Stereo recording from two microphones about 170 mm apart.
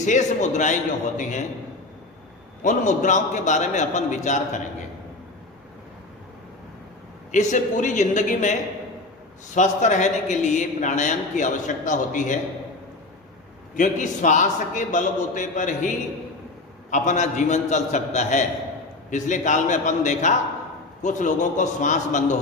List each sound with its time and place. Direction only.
0.0 s a man's voice: 45° left (ahead or behind)
2.6 s a man's voice: 45° left (ahead or behind)
7.3 s a man's voice: 45° left (ahead or behind)
9.6 s a man's voice: 45° left (ahead or behind)
13.7 s a man's voice: 45° left (ahead or behind)
16.9 s a man's voice: 45° left (ahead or behind)